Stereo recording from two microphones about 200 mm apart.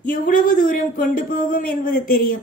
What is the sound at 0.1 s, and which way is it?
A woman's voice, 45° left (ahead or behind).